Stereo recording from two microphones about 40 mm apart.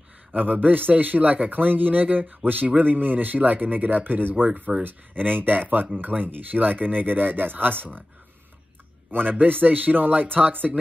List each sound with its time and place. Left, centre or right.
0.3 s speech: right
9.1 s speech: right